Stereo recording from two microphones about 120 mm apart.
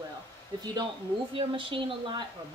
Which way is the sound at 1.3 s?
45° right (ahead or behind).